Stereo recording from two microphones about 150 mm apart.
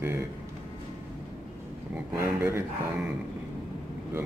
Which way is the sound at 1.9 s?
15° right (ahead or behind).